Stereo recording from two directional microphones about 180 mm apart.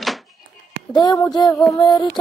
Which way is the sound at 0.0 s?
Centre (ahead or behind).